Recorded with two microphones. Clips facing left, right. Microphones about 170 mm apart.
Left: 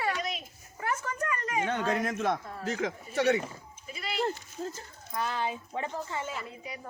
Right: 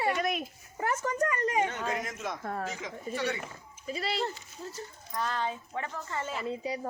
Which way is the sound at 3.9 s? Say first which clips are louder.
Right 2 dB; 35° right (ahead or behind).